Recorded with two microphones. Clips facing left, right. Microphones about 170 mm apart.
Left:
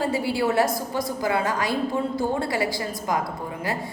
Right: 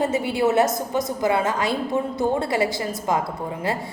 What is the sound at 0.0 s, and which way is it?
A woman's voice, 20° right (ahead or behind).